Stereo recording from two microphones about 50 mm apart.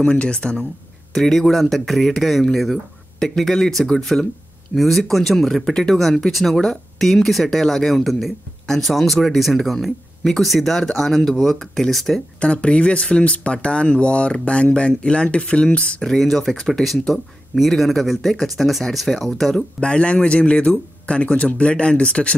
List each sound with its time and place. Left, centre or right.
0.0 s speech: left
1.1 s speech: centre
12.4 s speech: left
16.1 s speech: centre
19.5 s speech: centre